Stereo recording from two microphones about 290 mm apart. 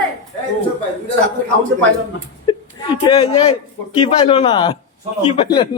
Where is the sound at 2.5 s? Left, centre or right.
Centre.